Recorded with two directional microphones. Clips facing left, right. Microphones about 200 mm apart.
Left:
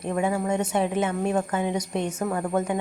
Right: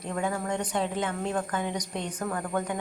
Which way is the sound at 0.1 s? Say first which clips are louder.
Left 5 dB; 15° left (ahead or behind).